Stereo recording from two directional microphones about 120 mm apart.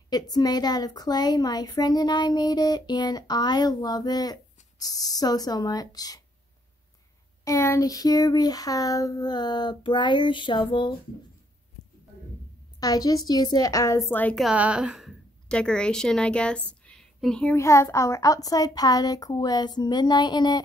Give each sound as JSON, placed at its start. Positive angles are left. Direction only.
{"t": 0.1, "sound": "a woman's voice", "side_deg": 35}
{"t": 7.4, "sound": "a woman's voice", "side_deg": 25}
{"t": 12.8, "sound": "a woman's voice", "side_deg": 30}
{"t": 14.2, "sound": "a woman's voice", "side_deg": 5}
{"t": 14.5, "sound": "a woman's voice", "side_deg": -10}
{"t": 17.6, "sound": "a woman's voice", "side_deg": 25}